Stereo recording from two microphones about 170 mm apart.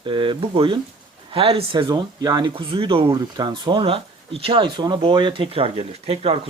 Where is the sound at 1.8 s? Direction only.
25° right (ahead or behind).